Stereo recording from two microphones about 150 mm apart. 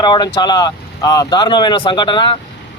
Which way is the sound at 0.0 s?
30° left (ahead or behind).